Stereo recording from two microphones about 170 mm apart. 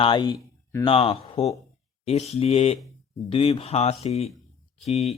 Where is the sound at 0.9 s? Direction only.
35° left (ahead or behind).